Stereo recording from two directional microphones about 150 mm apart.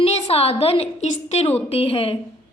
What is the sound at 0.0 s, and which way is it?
A woman's voice, 45° left (ahead or behind).